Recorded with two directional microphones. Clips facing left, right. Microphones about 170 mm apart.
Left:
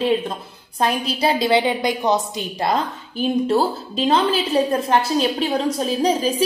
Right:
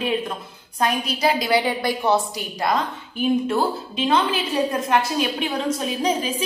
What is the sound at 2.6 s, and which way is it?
A woman's voice, 35° left (ahead or behind).